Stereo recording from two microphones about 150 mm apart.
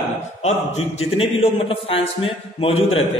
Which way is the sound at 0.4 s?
45° left (ahead or behind).